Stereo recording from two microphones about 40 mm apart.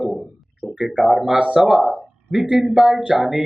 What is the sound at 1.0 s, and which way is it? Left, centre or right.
A man's voice, centre.